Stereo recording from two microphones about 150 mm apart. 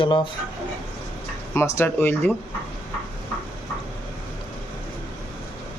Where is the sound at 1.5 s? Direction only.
15° left (ahead or behind).